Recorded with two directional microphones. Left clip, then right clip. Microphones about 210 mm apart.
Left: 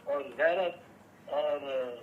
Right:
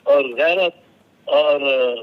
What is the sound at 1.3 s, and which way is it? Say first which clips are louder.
Speech: right 16 dB; 70° right (ahead or behind).